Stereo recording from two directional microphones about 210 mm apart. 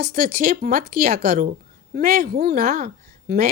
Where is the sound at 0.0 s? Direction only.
45° right (ahead or behind).